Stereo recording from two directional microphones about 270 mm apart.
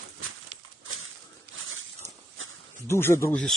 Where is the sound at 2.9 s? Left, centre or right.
Centre.